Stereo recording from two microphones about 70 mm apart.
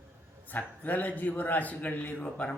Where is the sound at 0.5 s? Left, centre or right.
Left.